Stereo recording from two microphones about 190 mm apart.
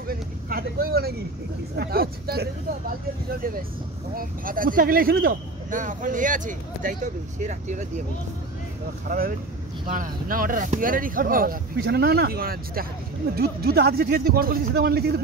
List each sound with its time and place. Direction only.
0.1 s vehicle: 50° right (ahead or behind)
1.8 s speech: 55° right (ahead or behind)
9.8 s speech: 45° right (ahead or behind)